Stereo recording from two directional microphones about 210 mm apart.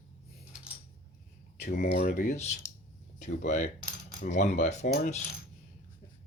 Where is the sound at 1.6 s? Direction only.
50° left (ahead or behind).